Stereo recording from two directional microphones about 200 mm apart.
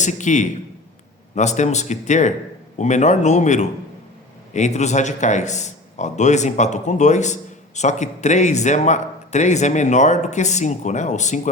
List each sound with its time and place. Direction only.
0.0 s a man's voice: 40° left (ahead or behind)